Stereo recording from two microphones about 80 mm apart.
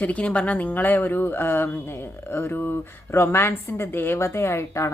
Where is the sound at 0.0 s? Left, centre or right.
Centre.